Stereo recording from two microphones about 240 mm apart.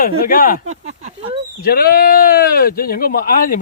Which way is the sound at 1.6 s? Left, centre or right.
Left.